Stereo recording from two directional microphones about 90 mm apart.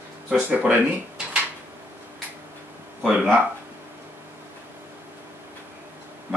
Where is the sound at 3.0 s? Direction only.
5° right (ahead or behind).